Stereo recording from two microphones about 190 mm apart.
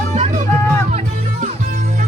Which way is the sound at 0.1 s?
35° right (ahead or behind).